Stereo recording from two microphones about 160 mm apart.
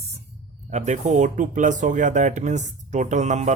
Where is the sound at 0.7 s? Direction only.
45° right (ahead or behind).